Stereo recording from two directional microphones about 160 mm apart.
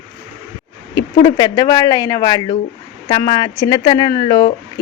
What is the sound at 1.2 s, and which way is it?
Speech, 25° left (ahead or behind).